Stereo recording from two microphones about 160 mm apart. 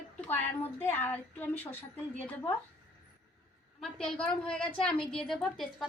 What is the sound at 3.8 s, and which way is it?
A woman's voice, 5° left (ahead or behind).